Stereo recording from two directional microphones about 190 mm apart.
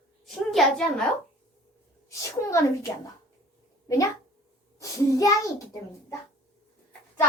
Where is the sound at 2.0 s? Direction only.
15° left (ahead or behind).